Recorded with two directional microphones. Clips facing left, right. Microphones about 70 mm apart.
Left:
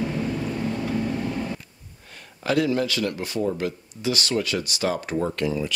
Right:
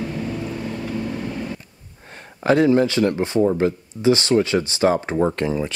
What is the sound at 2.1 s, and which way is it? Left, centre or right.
Speech, right.